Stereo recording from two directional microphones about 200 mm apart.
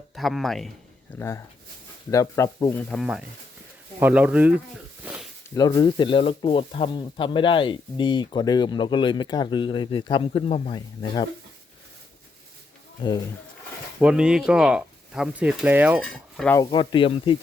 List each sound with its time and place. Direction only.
0.2 s speech: centre (ahead or behind)
2.0 s speech: 15° left (ahead or behind)
2.9 s speech: centre (ahead or behind)
5.0 s a sound: 5° right (ahead or behind)
5.5 s speech: 20° left (ahead or behind)
13.0 s speech: 20° left (ahead or behind)
14.0 s speech: 5° right (ahead or behind)
16.0 s cutlery: 5° left (ahead or behind)
16.6 s speech: 20° left (ahead or behind)